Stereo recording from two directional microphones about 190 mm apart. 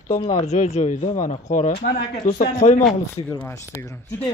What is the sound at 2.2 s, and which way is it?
Speech, 40° left (ahead or behind).